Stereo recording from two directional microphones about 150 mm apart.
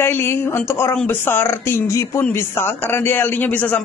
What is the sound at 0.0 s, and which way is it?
A man's voice, 15° left (ahead or behind).